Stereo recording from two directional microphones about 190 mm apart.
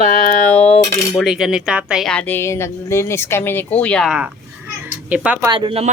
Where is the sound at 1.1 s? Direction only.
Centre (ahead or behind).